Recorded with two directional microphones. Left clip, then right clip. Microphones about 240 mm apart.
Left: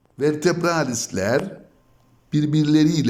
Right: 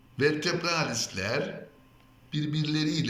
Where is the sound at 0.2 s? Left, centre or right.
Left.